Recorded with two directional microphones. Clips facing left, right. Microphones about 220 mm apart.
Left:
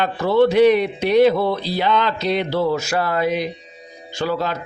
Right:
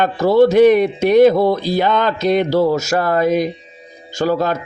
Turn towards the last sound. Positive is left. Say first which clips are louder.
# right 5 dB
turn(degrees=-45)  # may be behind; listen again after turning